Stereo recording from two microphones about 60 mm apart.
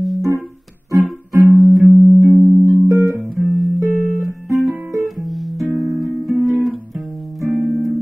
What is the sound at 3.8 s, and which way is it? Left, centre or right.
Music, right.